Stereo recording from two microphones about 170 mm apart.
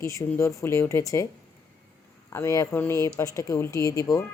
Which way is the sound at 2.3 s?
15° left (ahead or behind).